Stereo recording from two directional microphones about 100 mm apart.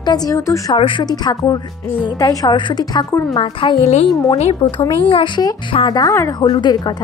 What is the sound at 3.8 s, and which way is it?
Speech, 90° left.